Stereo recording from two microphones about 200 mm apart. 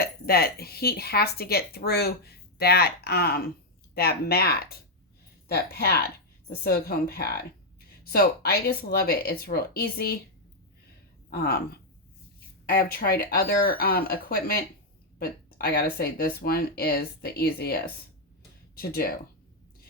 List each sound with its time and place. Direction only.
0.0 s speech: 50° left (ahead or behind)
11.3 s speech: 55° left (ahead or behind)